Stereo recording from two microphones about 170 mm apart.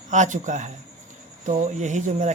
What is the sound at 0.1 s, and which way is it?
Speech, 45° right (ahead or behind).